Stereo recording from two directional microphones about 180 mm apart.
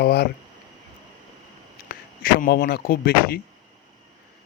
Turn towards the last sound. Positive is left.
turn(degrees=55)  # may be behind; listen again after turning